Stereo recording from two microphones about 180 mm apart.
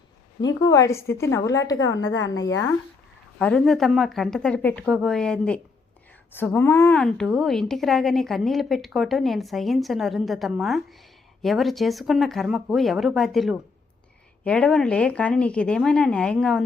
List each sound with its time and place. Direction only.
0.4 s a woman's voice: 20° left (ahead or behind)
1.7 s a woman's voice: 90° left
2.3 s speech: 20° left (ahead or behind)
3.3 s a woman's voice: 5° left (ahead or behind)
7.0 s a woman's voice: centre (ahead or behind)